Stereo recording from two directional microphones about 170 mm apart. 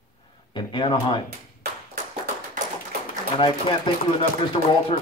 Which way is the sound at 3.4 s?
30° left (ahead or behind).